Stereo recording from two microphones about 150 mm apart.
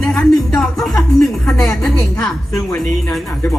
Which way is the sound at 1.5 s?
20° left (ahead or behind).